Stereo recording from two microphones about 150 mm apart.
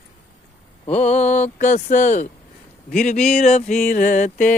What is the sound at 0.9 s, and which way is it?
Music, 50° left (ahead or behind).